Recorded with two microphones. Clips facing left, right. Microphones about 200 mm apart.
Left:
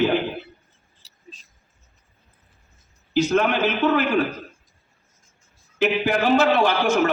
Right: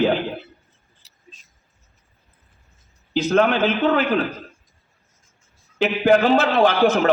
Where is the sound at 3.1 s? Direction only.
60° right (ahead or behind).